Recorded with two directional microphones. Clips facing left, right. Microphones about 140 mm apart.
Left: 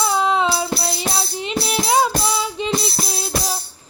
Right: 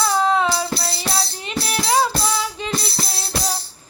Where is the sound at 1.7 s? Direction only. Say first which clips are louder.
Left 1 dB; 15° left (ahead or behind).